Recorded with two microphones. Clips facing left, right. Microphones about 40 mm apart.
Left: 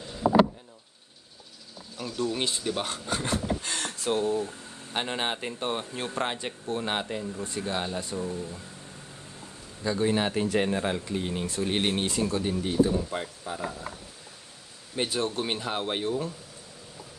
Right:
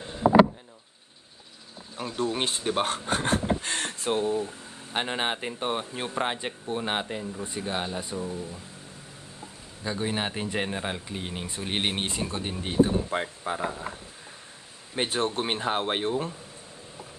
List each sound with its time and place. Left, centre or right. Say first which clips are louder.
2.0 s speech: right 1 dB; right
4.5 s speech: even; centre
9.8 s speech: left 4 dB; centre; by 13.8 s right
15.0 s speech: right 1 dB; right